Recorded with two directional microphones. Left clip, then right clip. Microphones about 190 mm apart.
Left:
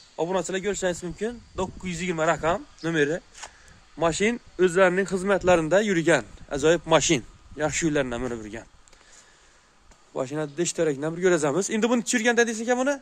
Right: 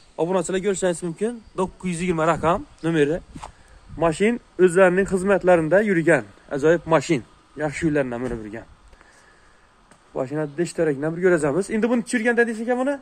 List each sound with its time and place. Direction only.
0.1 s a man's voice: centre (ahead or behind); by 8.6 s 30° left (ahead or behind)
10.1 s speech: 20° left (ahead or behind)